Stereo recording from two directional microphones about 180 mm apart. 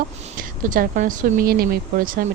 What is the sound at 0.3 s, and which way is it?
Speech, 50° right (ahead or behind).